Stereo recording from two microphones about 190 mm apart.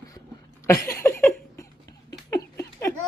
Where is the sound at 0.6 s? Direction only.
15° left (ahead or behind).